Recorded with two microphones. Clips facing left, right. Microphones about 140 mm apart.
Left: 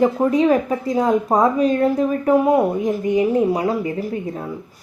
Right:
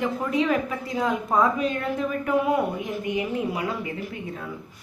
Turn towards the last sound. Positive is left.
turn(degrees=35)  # may be behind; listen again after turning